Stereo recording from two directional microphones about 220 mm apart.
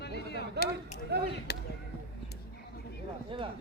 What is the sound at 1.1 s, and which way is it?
Speech, 50° right (ahead or behind).